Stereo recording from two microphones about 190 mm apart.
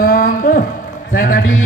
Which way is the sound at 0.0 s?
50° left (ahead or behind).